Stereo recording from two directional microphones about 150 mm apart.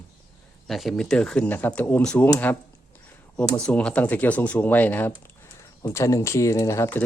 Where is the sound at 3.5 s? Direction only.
10° left (ahead or behind).